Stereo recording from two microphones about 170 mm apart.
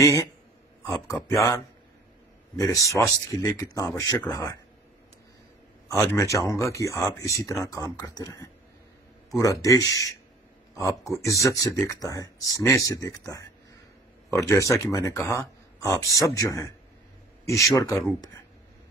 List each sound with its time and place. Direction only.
0.0 s speech: 20° left (ahead or behind)
2.5 s speech: 20° left (ahead or behind)
5.9 s speech: 15° left (ahead or behind)
11.1 s speech: 20° left (ahead or behind)